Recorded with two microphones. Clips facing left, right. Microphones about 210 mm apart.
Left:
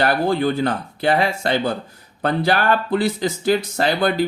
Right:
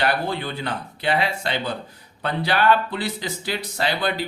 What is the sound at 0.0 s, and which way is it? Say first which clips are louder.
Speech: left 6 dB; 45° left (ahead or behind).